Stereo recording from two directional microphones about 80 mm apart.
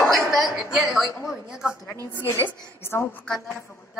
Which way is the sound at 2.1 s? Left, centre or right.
Left.